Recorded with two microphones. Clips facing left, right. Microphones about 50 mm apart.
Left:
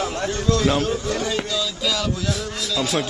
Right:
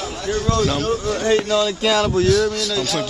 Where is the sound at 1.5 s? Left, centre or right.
Right.